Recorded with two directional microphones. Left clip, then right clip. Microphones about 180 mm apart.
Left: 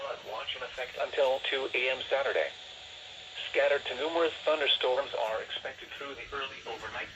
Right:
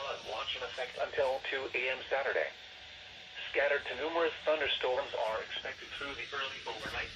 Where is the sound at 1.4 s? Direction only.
30° left (ahead or behind).